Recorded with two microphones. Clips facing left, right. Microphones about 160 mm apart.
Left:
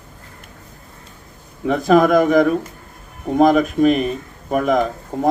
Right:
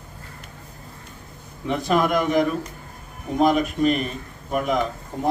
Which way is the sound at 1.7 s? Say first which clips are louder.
Left 7 dB; 45° left (ahead or behind).